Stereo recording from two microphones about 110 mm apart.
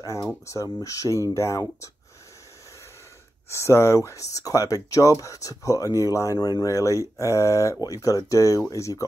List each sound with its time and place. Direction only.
0.0 s speech: 30° left (ahead or behind)
3.4 s speech: 25° left (ahead or behind)